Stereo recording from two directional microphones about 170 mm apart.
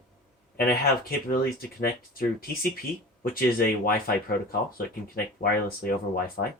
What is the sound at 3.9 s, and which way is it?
Speech, 60° left (ahead or behind).